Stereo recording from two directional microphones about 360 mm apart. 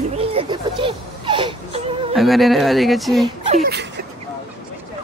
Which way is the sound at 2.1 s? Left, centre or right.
Centre.